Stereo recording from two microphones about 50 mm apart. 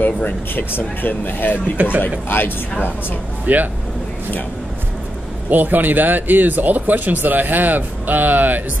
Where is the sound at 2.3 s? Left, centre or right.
Left.